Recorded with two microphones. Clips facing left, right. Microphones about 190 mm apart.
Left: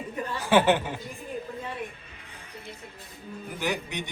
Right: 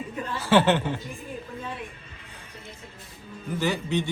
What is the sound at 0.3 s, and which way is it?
Speech, 15° left (ahead or behind).